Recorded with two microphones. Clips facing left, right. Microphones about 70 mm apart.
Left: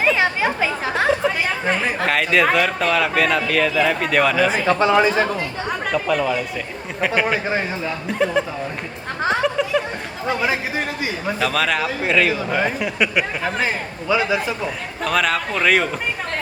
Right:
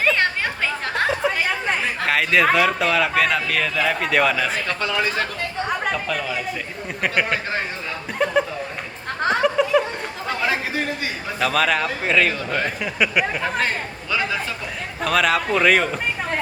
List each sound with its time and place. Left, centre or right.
0.0 s chatter: centre
4.6 s speech: centre
5.5 s speech: centre
9.2 s a sound: centre
10.2 s speech: centre
11.3 s speech: centre
14.1 s speech: centre
15.0 s speech: centre